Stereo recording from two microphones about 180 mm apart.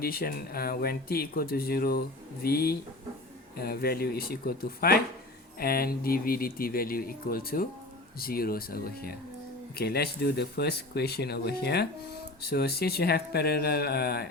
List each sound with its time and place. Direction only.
0.0 s speech: 55° left (ahead or behind)